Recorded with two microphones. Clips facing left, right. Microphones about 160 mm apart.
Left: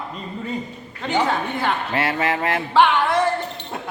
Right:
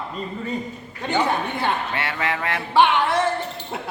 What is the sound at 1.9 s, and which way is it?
Speech, 25° left (ahead or behind).